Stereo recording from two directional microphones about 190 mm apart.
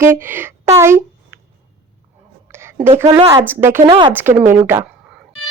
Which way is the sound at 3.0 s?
20° right (ahead or behind).